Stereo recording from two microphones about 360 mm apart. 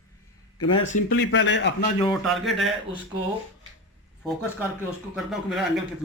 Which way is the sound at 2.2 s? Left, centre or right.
Centre.